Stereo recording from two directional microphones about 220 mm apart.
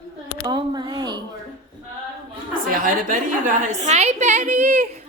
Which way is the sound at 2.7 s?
40° right (ahead or behind).